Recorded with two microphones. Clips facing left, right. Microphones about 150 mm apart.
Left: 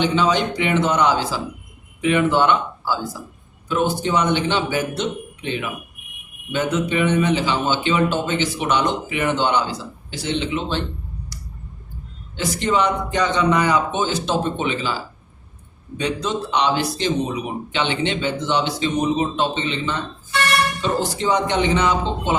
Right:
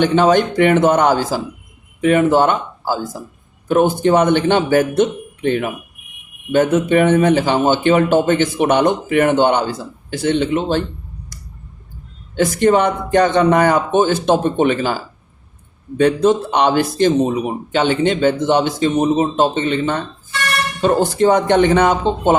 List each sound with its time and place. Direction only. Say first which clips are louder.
0.0 s a man's voice: right 6 dB; 50° right (ahead or behind)
12.4 s a man's voice: right 7 dB; 50° right (ahead or behind)